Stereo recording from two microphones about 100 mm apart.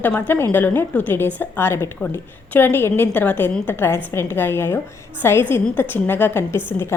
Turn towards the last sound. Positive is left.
turn(degrees=25)  # may be behind; listen again after turning